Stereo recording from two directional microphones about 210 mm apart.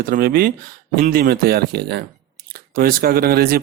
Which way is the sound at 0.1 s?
45° right (ahead or behind).